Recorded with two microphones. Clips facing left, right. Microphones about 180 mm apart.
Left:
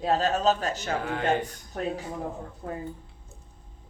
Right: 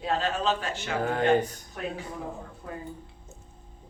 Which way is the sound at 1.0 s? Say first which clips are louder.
Right 4 dB; 40° right (ahead or behind).